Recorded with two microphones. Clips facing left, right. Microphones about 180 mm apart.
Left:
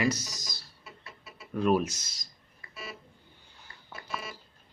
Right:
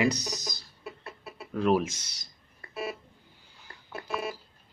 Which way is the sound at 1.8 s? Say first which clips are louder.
Even; 70° right (ahead or behind).